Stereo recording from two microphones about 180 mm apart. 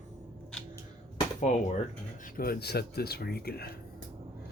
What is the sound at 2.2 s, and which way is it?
Speech, 55° left (ahead or behind).